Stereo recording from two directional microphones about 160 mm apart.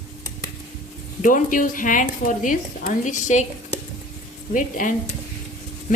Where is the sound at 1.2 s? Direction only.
55° left (ahead or behind).